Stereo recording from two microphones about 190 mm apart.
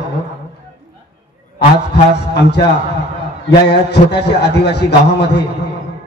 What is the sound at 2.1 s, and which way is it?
A man's voice, 60° left (ahead or behind).